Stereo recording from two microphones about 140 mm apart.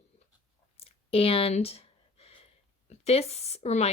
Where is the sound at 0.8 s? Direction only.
45° left (ahead or behind).